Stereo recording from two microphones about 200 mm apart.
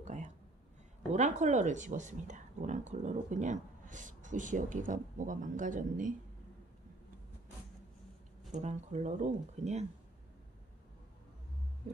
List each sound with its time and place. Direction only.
0.0 s a sound: 35° right (ahead or behind)
1.1 s speech: 35° right (ahead or behind)
8.5 s speech: 35° right (ahead or behind)